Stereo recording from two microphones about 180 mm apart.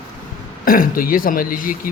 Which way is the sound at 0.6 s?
50° left (ahead or behind).